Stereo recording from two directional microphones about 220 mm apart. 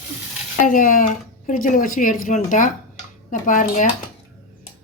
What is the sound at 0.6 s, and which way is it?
Speech, 40° left (ahead or behind).